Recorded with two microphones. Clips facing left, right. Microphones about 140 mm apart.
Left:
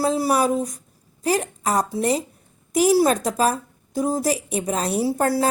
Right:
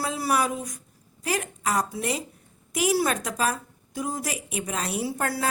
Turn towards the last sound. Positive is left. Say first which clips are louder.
# left 8 dB
turn(degrees=35)  # may be behind; listen again after turning